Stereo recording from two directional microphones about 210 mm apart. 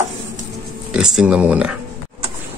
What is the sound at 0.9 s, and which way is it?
Speech, 5° right (ahead or behind).